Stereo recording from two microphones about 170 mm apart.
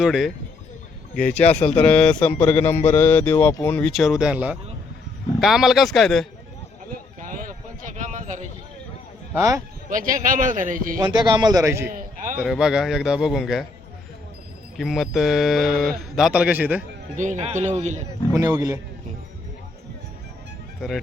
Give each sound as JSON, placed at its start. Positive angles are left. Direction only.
{"t": 0.0, "sound": "speech", "side_deg": 0}
{"t": 3.9, "sound": "speech", "side_deg": 0}
{"t": 6.9, "sound": "a sound", "side_deg": -55}
{"t": 9.3, "sound": "speech", "side_deg": -20}
{"t": 9.9, "sound": "a man's voice", "side_deg": -50}
{"t": 11.0, "sound": "speech", "side_deg": -25}
{"t": 11.9, "sound": "a sound", "side_deg": -55}
{"t": 12.4, "sound": "speech", "side_deg": 0}
{"t": 14.8, "sound": "speech", "side_deg": 0}
{"t": 17.2, "sound": "a man's voice", "side_deg": -45}
{"t": 18.3, "sound": "speech", "side_deg": -20}